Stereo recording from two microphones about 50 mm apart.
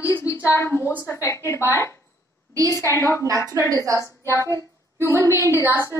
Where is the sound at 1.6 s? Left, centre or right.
Left.